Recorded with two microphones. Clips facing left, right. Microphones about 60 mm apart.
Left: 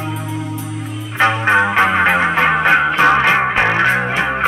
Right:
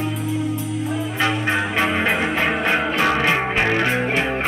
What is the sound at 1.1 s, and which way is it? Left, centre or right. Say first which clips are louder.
Music: left 9 dB; left.